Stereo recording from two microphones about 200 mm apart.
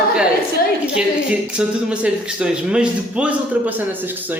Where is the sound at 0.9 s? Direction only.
5° right (ahead or behind).